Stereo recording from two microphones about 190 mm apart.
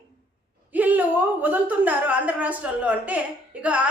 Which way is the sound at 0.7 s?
10° right (ahead or behind).